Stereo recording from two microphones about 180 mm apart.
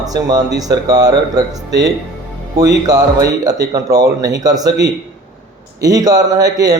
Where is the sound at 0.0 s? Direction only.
20° right (ahead or behind).